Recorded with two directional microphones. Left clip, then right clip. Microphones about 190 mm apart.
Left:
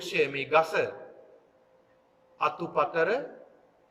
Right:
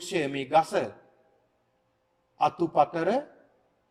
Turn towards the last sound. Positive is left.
turn(degrees=-45)  # may be behind; listen again after turning